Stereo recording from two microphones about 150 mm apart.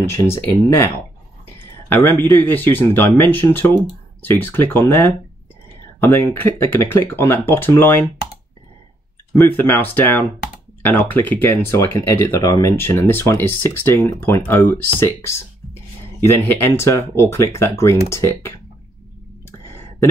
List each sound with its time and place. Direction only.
0.1 s speech: 15° left (ahead or behind)
9.5 s speech: 10° left (ahead or behind)
19.6 s a sound: 15° left (ahead or behind)